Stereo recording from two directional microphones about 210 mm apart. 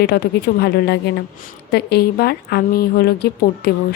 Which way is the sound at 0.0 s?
50° left (ahead or behind).